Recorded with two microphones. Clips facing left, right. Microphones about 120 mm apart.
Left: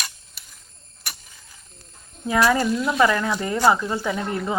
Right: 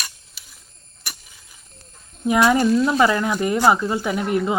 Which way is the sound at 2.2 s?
20° right (ahead or behind).